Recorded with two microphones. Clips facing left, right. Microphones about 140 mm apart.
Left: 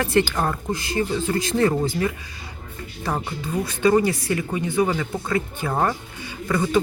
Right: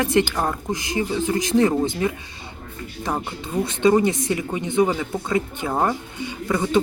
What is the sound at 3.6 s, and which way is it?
Speech, 25° right (ahead or behind).